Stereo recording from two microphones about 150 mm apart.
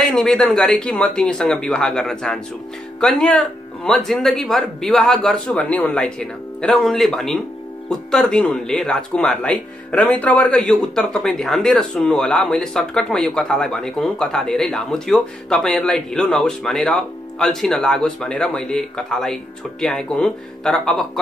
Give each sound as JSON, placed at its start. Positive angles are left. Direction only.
{"t": 0.0, "sound": "speech", "side_deg": 5}